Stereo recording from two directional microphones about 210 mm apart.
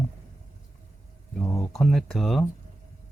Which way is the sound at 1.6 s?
Centre (ahead or behind).